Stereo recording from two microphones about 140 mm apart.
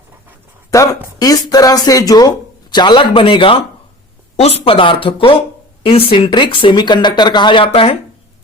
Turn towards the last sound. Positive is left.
turn(degrees=35)  # may be behind; listen again after turning